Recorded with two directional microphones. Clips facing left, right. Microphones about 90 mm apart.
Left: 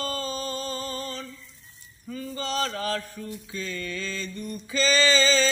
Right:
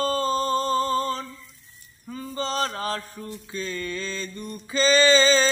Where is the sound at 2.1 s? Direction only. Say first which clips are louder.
Right 2 dB; 30° right (ahead or behind).